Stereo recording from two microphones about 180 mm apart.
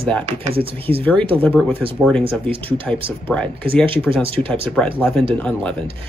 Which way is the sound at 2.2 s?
30° right (ahead or behind).